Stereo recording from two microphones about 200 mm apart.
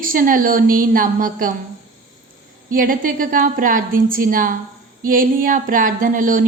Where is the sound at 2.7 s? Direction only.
45° right (ahead or behind).